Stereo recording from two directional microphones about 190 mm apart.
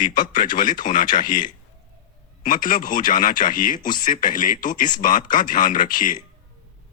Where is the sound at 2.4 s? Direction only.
45° left (ahead or behind).